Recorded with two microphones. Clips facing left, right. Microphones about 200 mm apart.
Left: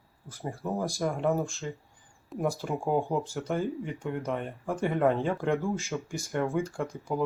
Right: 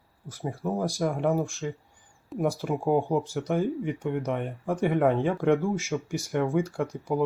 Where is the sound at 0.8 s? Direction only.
15° right (ahead or behind).